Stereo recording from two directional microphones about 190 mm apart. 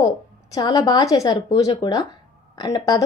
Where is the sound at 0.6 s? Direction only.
20° left (ahead or behind).